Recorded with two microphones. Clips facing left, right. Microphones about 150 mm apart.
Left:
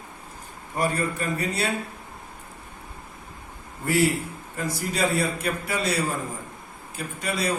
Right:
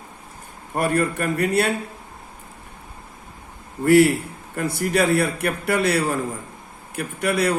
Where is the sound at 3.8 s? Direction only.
60° right (ahead or behind).